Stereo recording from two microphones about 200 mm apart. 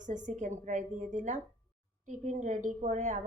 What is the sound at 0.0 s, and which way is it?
A woman's voice, 40° right (ahead or behind).